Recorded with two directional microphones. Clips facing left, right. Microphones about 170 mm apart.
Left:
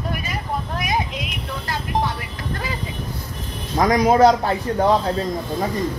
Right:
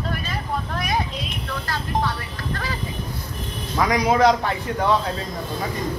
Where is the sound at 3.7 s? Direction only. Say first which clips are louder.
Left 4 dB; 45° left (ahead or behind).